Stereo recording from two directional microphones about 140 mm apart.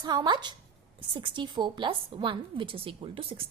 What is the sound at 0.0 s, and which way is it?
A woman's voice, 30° right (ahead or behind).